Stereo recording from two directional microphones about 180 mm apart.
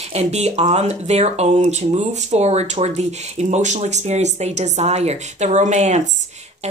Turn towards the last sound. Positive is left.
turn(degrees=-40)  # may be behind; listen again after turning